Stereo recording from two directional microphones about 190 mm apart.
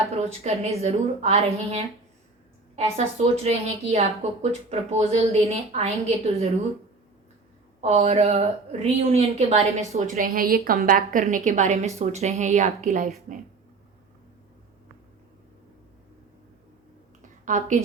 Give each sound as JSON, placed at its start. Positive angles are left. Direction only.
{"t": 0.4, "sound": "a woman's voice", "side_deg": -35}
{"t": 3.3, "sound": "a woman's voice", "side_deg": -35}
{"t": 7.8, "sound": "a woman's voice", "side_deg": -35}
{"t": 17.4, "sound": "a woman's voice", "side_deg": -40}